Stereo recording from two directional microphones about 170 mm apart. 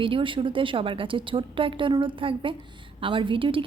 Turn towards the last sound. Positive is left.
turn(degrees=-30)  # may be behind; listen again after turning